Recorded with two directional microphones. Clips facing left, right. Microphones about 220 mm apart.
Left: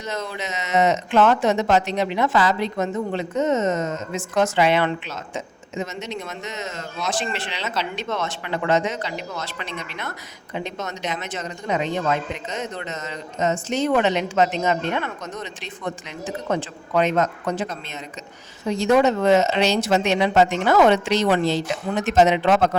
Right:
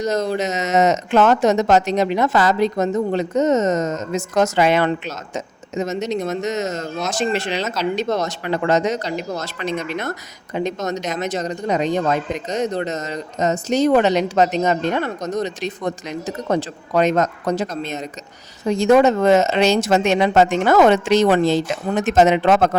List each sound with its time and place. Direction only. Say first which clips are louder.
0.0 s speech: right 9 dB; 40° right (ahead or behind)